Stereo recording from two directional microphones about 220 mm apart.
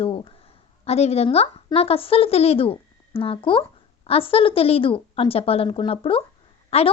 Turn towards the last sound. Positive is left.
turn(degrees=30)  # may be behind; listen again after turning